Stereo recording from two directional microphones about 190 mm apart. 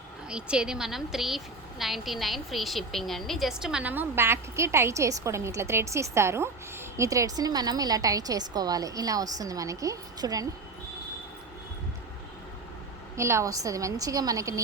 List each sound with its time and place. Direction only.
0.3 s a woman's voice: 5° right (ahead or behind)
13.1 s a woman's voice: 15° right (ahead or behind)